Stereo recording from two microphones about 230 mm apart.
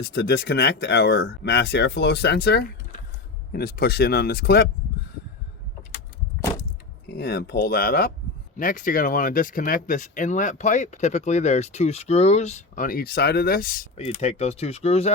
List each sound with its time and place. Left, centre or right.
0.0 s speech: left
7.1 s speech: left